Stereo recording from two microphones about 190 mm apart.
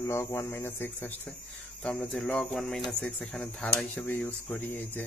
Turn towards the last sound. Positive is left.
turn(degrees=10)  # may be behind; listen again after turning